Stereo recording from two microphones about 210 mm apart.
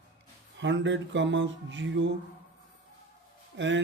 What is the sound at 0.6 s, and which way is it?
A man's voice, 60° right (ahead or behind).